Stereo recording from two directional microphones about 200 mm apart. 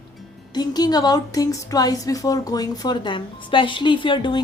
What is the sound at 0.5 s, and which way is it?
Speech, 20° left (ahead or behind).